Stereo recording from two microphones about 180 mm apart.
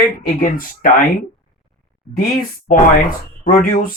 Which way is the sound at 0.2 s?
50° left (ahead or behind).